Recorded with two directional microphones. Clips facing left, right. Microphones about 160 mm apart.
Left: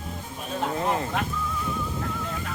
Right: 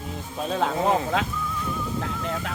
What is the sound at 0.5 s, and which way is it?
Speech, 90° right.